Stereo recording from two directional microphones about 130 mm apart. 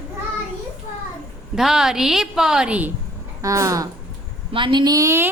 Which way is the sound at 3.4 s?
25° right (ahead or behind).